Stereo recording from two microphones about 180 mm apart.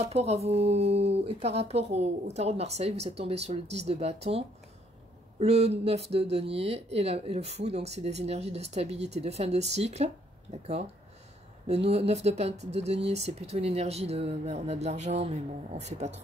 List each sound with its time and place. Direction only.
0.0 s speech: 35° right (ahead or behind)